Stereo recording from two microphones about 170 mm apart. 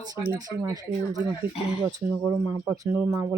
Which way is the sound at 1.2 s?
10° right (ahead or behind).